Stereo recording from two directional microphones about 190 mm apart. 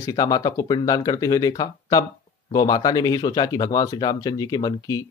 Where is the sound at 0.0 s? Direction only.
20° left (ahead or behind).